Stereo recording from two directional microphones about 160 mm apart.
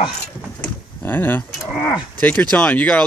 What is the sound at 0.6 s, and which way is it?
Door, 10° left (ahead or behind).